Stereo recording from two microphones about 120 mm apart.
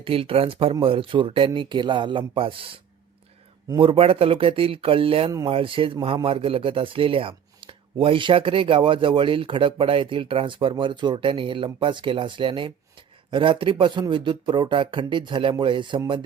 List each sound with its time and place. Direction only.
0.0 s speech: 50° right (ahead or behind)